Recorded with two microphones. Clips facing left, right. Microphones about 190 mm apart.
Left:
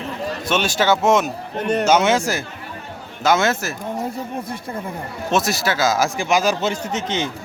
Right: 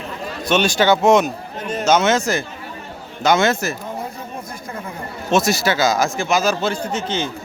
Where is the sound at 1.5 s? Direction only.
65° left (ahead or behind).